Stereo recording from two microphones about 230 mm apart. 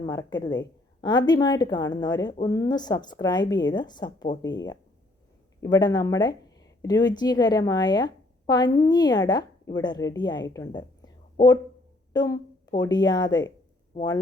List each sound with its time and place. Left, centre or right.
0.0 s a woman's voice: centre